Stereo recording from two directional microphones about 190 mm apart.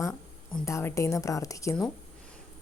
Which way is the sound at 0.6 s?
15° left (ahead or behind).